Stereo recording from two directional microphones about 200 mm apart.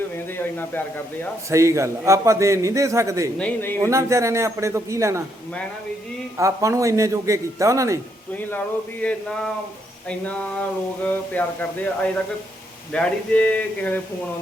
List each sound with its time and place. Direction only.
0.3 s speech: 10° left (ahead or behind)
1.5 s a man's voice: 15° right (ahead or behind)
3.3 s speech: 10° left (ahead or behind)
3.8 s a man's voice: 15° right (ahead or behind)
6.3 s a man's voice: 15° right (ahead or behind)
8.4 s speech: 10° left (ahead or behind)
12.9 s speech: 5° left (ahead or behind)